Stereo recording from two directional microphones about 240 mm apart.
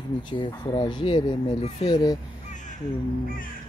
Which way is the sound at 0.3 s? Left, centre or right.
Centre.